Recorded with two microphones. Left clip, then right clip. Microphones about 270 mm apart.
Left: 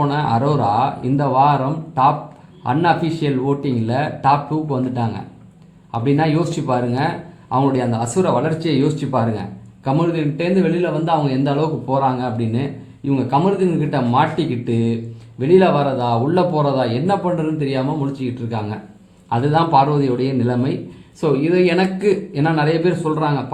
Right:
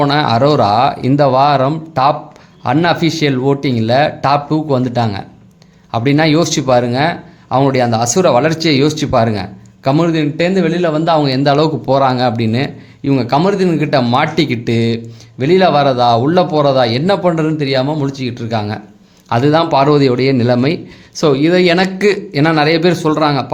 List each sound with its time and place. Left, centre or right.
0.0 s speech: right
2.6 s speech: right